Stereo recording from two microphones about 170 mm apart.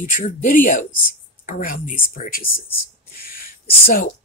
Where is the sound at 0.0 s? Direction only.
50° left (ahead or behind).